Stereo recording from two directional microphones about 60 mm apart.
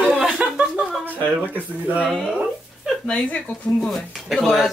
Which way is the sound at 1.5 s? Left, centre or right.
Right.